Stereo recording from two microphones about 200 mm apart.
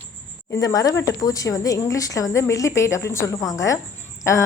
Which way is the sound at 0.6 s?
20° left (ahead or behind).